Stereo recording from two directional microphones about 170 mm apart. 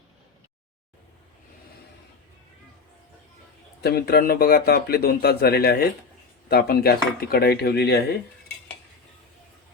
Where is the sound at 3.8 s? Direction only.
65° left (ahead or behind).